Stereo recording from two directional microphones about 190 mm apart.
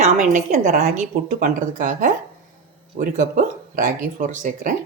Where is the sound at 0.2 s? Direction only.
40° right (ahead or behind).